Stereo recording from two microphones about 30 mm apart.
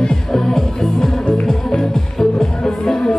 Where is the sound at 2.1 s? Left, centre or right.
Centre.